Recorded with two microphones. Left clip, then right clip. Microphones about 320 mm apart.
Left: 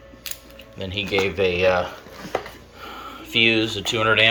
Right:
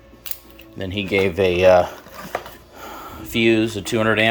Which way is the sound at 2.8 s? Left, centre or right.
Right.